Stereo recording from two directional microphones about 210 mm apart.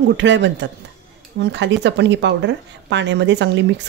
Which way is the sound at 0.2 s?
55° right (ahead or behind).